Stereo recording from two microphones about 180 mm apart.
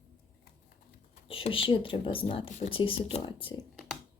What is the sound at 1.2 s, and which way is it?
A woman's voice, 30° left (ahead or behind).